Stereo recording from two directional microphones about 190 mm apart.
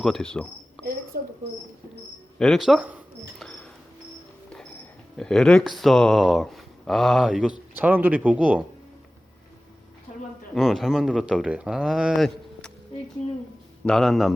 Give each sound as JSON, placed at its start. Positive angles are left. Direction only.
{"t": 0.0, "sound": "speech", "side_deg": 5}
{"t": 2.4, "sound": "camera", "side_deg": 0}
{"t": 3.4, "sound": "bird", "side_deg": 5}
{"t": 5.1, "sound": "speech", "side_deg": 5}
{"t": 10.5, "sound": "speech", "side_deg": 0}
{"t": 13.8, "sound": "speech", "side_deg": 0}